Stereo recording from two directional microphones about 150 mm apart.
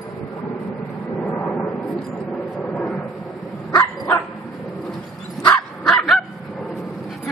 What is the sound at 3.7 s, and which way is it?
Dog, 15° left (ahead or behind).